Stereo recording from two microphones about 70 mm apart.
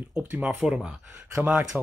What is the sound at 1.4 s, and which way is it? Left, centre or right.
Speech, right.